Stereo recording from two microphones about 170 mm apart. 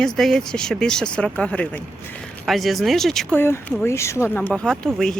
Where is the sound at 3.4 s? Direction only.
15° left (ahead or behind).